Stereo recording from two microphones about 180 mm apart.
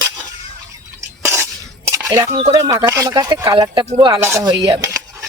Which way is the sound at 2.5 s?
20° right (ahead or behind).